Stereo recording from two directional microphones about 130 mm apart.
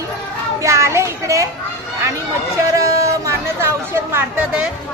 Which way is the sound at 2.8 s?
25° right (ahead or behind).